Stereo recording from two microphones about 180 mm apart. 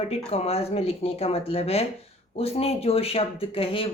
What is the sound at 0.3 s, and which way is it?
A woman's voice, 35° left (ahead or behind).